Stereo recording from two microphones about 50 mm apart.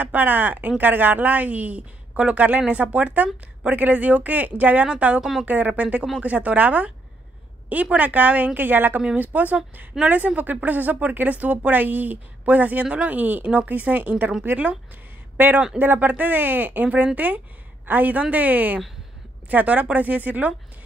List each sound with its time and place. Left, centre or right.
0.0 s a woman's voice: right
9.0 s speech: right
14.4 s speech: right